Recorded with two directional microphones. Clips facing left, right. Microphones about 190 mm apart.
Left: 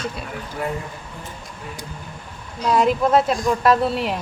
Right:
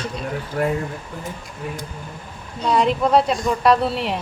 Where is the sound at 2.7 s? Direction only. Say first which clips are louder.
Even; centre (ahead or behind).